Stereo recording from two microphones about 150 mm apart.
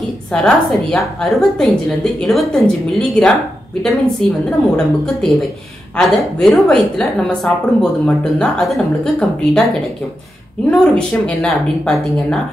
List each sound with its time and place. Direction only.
0.3 s a woman's voice: 5° left (ahead or behind)
10.7 s a woman's voice: 5° left (ahead or behind)